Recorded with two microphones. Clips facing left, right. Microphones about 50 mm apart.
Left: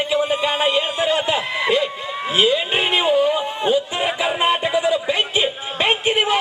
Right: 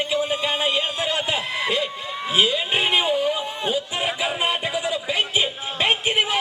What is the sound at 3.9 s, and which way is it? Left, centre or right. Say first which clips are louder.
Music: left 4 dB; centre.